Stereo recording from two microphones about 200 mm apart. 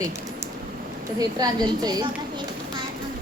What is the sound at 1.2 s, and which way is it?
Speech, 20° right (ahead or behind).